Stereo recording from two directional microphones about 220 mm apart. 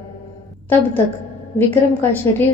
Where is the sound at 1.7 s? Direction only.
10° left (ahead or behind).